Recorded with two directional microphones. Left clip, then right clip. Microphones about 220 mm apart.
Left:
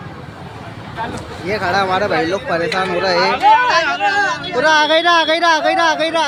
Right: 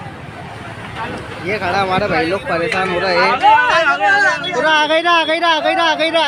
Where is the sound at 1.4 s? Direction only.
5° left (ahead or behind).